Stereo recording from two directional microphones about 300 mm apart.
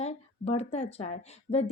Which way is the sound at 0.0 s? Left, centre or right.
Left.